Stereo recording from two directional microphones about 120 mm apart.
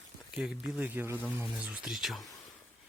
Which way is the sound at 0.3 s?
5° right (ahead or behind).